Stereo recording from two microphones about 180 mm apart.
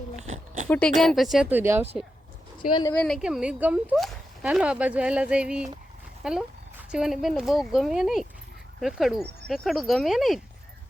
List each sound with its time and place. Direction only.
0.2 s oink: 40° right (ahead or behind)
0.7 s speech: 5° left (ahead or behind); by 1.9 s 10° right (ahead or behind)
2.9 s speech: 10° left (ahead or behind)
3.2 s speech: 5° right (ahead or behind)